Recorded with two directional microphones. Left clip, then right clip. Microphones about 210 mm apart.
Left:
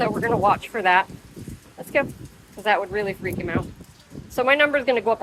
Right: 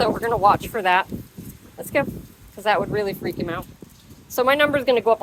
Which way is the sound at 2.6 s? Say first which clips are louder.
Right 1 dB; 25° right (ahead or behind).